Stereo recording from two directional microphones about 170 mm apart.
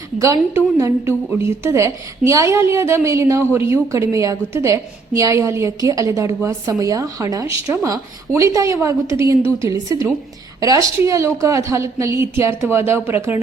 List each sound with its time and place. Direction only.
0.2 s a woman's voice: 20° right (ahead or behind)
10.6 s a woman's voice: 20° right (ahead or behind)